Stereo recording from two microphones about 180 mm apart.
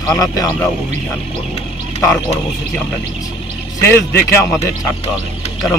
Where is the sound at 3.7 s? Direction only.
15° left (ahead or behind).